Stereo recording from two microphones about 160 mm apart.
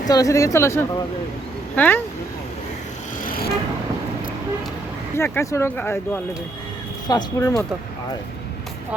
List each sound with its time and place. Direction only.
0.1 s speech: 20° left (ahead or behind)
5.1 s speech: 15° left (ahead or behind)
7.1 s speech: 25° left (ahead or behind)